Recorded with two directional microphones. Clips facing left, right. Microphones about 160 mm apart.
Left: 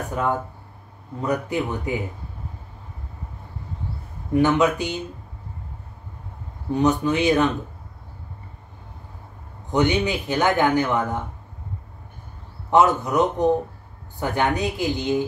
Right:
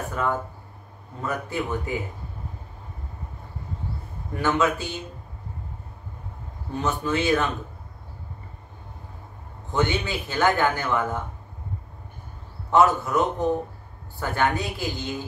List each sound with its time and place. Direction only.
0.1 s a woman's voice: 20° left (ahead or behind)
4.3 s a man's voice: 20° left (ahead or behind)
6.7 s a man's voice: 20° left (ahead or behind)
9.7 s a man's voice: 20° left (ahead or behind)
12.7 s a woman's voice: 20° left (ahead or behind)